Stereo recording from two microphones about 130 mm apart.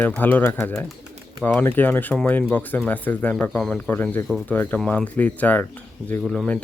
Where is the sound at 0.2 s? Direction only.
15° left (ahead or behind).